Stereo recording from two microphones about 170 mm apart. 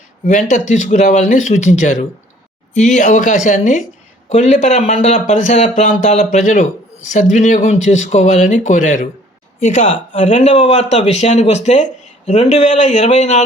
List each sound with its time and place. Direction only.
0.3 s speech: 45° left (ahead or behind)